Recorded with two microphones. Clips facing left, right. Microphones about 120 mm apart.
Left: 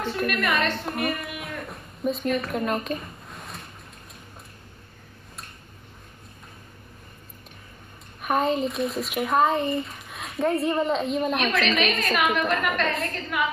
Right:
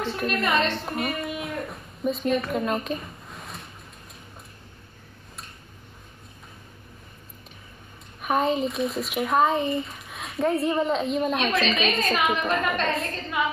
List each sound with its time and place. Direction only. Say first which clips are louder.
0.3 s a woman's voice: right 3 dB; 25° right (ahead or behind)
1.7 s a sound: even; centre (ahead or behind)
2.3 s a woman's voice: right 1 dB; centre (ahead or behind)
8.2 s speech: even; centre (ahead or behind)
11.3 s a woman's voice: even; 20° right (ahead or behind)